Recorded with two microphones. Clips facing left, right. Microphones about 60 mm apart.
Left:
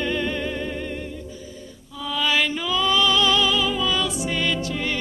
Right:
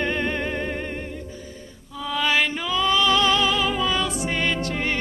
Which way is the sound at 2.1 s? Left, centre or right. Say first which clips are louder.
Even; right.